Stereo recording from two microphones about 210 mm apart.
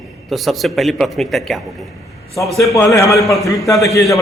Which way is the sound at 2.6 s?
15° left (ahead or behind).